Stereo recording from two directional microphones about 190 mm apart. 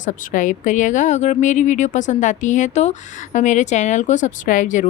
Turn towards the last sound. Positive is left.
turn(degrees=40)  # may be behind; listen again after turning